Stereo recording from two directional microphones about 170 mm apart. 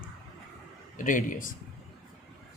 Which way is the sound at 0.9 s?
50° left (ahead or behind).